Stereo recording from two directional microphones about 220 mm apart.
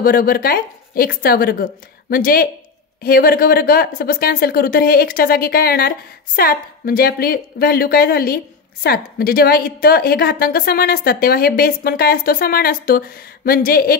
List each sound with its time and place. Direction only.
0.0 s a woman's voice: 40° left (ahead or behind)